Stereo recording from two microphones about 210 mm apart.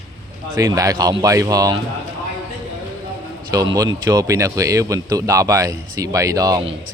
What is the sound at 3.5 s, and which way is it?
Speech, 15° right (ahead or behind).